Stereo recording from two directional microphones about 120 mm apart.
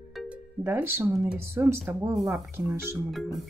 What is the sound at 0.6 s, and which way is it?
Speech, 20° right (ahead or behind).